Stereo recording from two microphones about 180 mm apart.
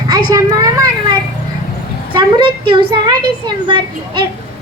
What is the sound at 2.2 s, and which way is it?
Speech, 25° right (ahead or behind).